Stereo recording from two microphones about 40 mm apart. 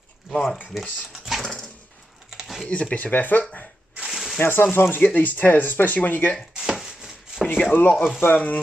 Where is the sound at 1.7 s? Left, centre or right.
Left.